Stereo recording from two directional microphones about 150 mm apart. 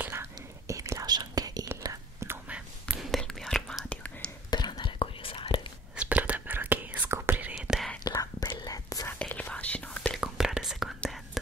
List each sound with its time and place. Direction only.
0.0 s whispering: 15° right (ahead or behind)
2.5 s whispering: centre (ahead or behind)
4.5 s whispering: 30° left (ahead or behind)
5.9 s whispering: 10° right (ahead or behind)
8.0 s whispering: 25° left (ahead or behind)
9.2 s whispering: 10° left (ahead or behind)